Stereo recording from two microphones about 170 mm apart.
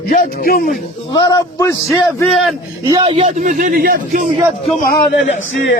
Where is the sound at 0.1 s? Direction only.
55° left (ahead or behind).